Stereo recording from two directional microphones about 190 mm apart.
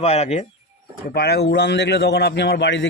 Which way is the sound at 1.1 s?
55° left (ahead or behind).